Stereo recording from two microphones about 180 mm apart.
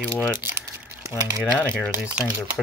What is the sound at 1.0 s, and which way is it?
Speech, 15° right (ahead or behind).